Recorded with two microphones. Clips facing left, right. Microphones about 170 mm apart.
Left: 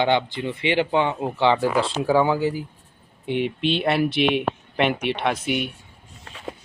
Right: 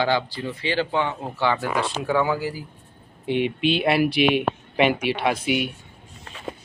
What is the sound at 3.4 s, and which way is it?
Speech, 5° right (ahead or behind).